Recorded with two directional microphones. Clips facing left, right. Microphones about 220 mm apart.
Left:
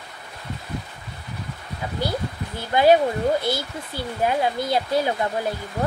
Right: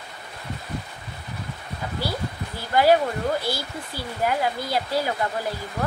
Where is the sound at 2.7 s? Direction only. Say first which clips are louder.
Left 2 dB; 20° left (ahead or behind).